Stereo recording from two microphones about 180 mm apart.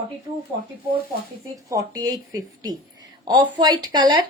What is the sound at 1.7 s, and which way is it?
A woman's voice, 20° right (ahead or behind).